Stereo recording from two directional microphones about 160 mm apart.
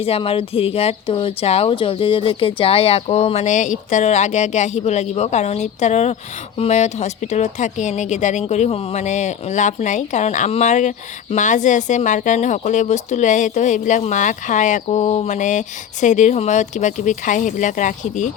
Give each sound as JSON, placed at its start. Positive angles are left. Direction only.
{"t": 0.0, "sound": "speech", "side_deg": 35}